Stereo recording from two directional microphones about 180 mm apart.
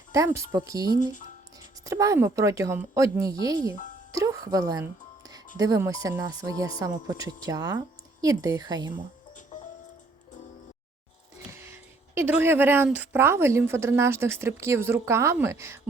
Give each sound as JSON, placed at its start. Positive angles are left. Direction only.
{"t": 0.1, "sound": "speech", "side_deg": -15}
{"t": 0.9, "sound": "speech", "side_deg": 45}
{"t": 1.8, "sound": "speech", "side_deg": -20}
{"t": 4.1, "sound": "music", "side_deg": -20}
{"t": 5.5, "sound": "speech", "side_deg": -15}
{"t": 11.5, "sound": "speech", "side_deg": -15}